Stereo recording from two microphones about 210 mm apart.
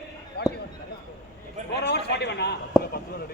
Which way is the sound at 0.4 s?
50° left (ahead or behind).